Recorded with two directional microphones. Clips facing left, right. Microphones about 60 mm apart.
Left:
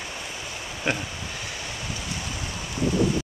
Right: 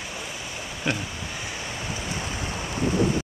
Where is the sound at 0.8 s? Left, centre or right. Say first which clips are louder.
Left 1 dB; left.